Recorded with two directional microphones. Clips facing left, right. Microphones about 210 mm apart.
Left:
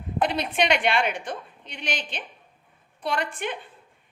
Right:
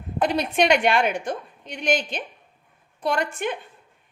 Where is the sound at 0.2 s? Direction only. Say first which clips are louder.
Right 3 dB; 45° right (ahead or behind).